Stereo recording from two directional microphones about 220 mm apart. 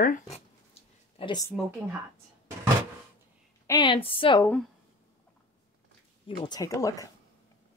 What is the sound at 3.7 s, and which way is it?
Speech, 20° left (ahead or behind).